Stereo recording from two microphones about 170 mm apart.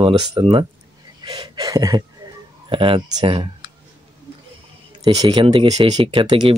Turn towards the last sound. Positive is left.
turn(degrees=-30)  # may be behind; listen again after turning